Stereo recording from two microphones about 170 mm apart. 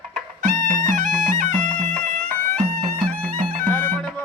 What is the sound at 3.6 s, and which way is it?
Music, 10° left (ahead or behind).